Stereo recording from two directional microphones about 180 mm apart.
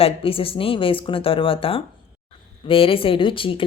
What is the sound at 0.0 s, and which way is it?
Speech, 30° left (ahead or behind).